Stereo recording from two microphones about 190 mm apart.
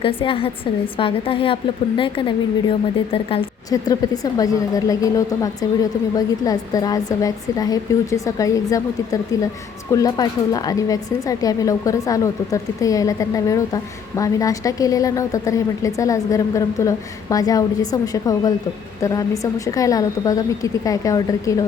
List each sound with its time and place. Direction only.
0.0 s a woman's voice: 30° left (ahead or behind)
3.7 s a woman's voice: 20° left (ahead or behind)
9.9 s a woman's voice: 20° left (ahead or behind)